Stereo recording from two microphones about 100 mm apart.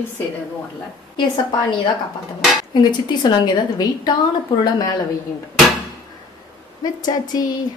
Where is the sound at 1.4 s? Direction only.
50° left (ahead or behind).